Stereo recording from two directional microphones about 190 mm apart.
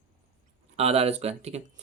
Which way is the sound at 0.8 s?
30° right (ahead or behind).